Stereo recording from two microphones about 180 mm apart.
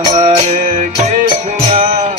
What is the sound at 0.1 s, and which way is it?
Music, 40° right (ahead or behind).